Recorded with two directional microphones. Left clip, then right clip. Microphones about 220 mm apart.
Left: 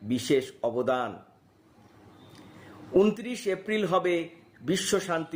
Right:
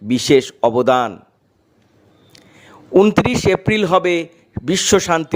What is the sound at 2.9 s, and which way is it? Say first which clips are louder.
A man's voice: right 12 dB; 35° right (ahead or behind).